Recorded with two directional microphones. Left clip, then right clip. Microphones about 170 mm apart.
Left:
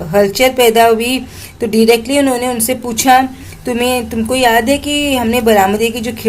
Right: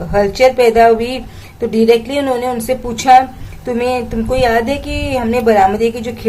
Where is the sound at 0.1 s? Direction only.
25° left (ahead or behind).